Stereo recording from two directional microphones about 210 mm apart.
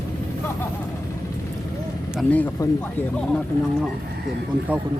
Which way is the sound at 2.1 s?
5° left (ahead or behind).